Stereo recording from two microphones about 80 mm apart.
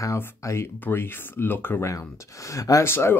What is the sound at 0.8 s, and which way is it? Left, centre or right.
Speech, left.